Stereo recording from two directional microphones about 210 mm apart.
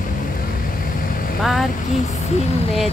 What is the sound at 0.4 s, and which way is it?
Vehicle, 40° left (ahead or behind).